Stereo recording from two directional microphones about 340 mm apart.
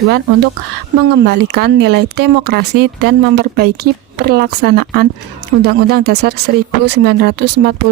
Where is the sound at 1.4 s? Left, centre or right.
Right.